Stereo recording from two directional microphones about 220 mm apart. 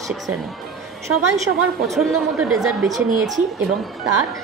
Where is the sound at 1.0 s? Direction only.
15° right (ahead or behind).